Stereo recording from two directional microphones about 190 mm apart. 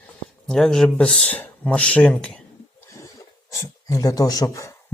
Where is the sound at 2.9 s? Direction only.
15° left (ahead or behind).